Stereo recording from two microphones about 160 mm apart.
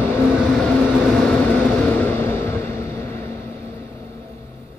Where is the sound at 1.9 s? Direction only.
10° left (ahead or behind).